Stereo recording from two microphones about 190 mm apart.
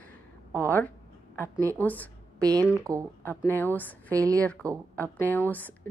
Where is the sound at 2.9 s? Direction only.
20° right (ahead or behind).